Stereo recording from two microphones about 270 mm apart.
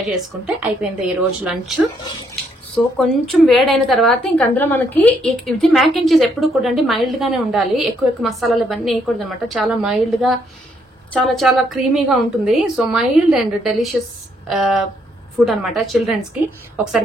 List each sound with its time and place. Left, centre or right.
0.1 s a woman's voice: centre
3.0 s a woman's voice: centre